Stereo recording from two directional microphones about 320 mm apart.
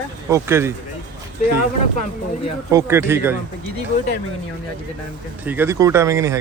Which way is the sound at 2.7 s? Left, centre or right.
Centre.